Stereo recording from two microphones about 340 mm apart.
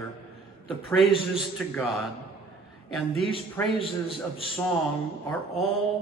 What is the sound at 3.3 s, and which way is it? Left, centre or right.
Speech, centre.